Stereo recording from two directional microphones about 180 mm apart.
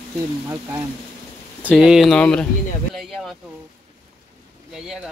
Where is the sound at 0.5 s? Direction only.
15° right (ahead or behind); by 3.3 s centre (ahead or behind).